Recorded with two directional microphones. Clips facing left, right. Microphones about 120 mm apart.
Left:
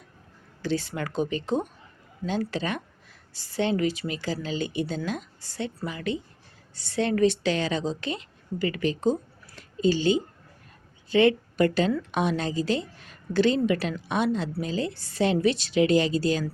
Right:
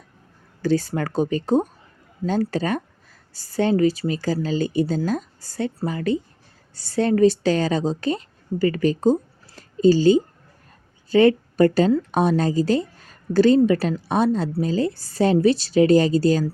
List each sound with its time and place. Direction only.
0.6 s speech: 40° right (ahead or behind)